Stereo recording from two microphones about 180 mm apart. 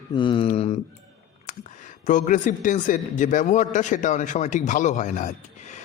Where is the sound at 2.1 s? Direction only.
45° left (ahead or behind).